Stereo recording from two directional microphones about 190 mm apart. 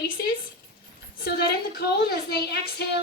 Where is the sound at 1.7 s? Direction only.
55° left (ahead or behind).